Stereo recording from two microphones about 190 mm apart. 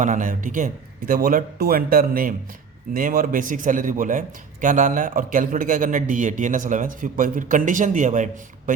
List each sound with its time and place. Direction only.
0.0 s speech: 40° right (ahead or behind)